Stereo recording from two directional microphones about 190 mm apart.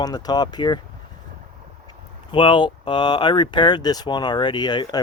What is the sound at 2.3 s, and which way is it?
Speech, 25° left (ahead or behind).